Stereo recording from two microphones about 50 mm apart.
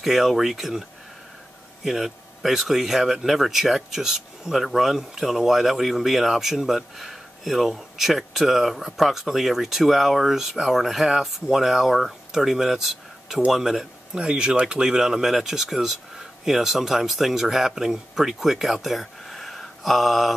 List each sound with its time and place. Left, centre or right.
0.0 s speech: centre
1.9 s speech: centre
14.1 s speech: centre